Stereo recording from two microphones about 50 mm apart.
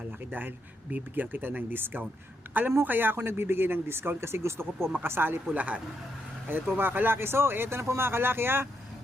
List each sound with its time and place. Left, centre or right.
0.3 s a man's voice: right
5.5 s speech: right
6.5 s speech: right